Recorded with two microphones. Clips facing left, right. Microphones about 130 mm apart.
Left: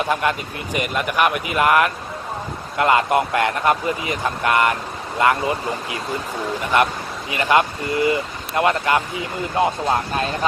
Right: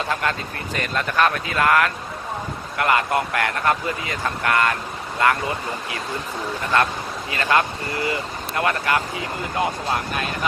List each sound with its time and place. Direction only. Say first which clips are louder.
0.0 s a man's voice: left 3 dB; 15° left (ahead or behind)